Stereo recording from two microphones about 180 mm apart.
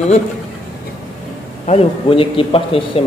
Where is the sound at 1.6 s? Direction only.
35° left (ahead or behind).